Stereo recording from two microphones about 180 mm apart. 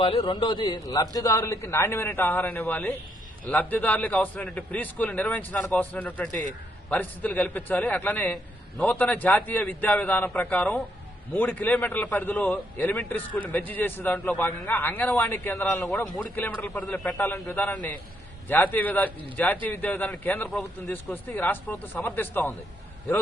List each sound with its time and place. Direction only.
0.0 s a man's voice: 30° left (ahead or behind); by 22.5 s 10° left (ahead or behind)